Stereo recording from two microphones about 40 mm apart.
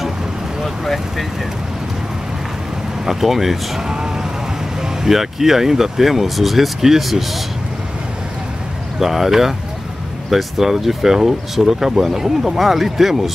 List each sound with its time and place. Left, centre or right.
0.8 s speech: centre
3.1 s speech: centre
3.9 s a sound: centre
4.8 s speech: centre
9.0 s speech: centre